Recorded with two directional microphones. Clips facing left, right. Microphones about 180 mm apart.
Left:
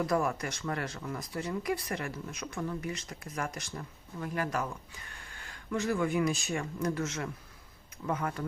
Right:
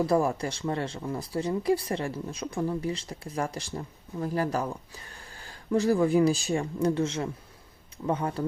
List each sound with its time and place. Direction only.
0.0 s speech: 30° right (ahead or behind)